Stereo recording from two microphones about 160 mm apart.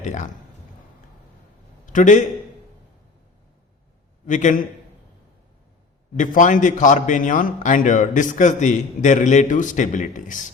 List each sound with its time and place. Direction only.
0.0 s speech: 50° left (ahead or behind)
1.9 s a man's voice: 55° left (ahead or behind)
4.3 s a man's voice: 50° left (ahead or behind)
6.1 s a man's voice: 55° left (ahead or behind)